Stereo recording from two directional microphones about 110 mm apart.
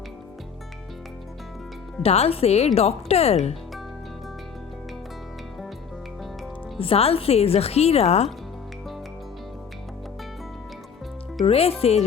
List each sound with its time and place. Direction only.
2.0 s speech: 65° left (ahead or behind)
6.7 s speech: 60° left (ahead or behind)
11.4 s speech: 65° left (ahead or behind)